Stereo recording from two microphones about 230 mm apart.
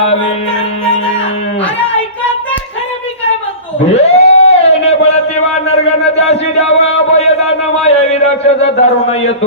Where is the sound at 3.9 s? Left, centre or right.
Left.